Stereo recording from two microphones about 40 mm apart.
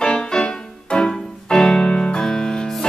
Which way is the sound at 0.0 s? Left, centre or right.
Centre.